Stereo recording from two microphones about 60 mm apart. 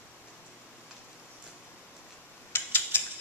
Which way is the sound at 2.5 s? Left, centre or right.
Left.